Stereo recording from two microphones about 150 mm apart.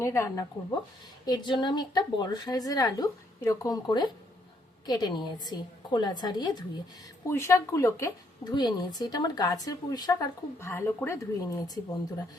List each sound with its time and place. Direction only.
0.0 s a woman's voice: 20° left (ahead or behind)